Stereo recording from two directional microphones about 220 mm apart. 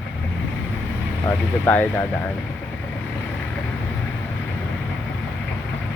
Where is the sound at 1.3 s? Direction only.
5° left (ahead or behind).